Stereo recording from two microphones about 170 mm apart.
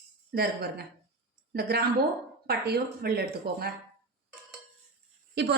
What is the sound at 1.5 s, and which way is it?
A woman's voice, 70° right (ahead or behind).